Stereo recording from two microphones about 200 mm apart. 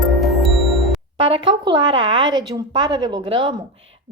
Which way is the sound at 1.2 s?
25° right (ahead or behind).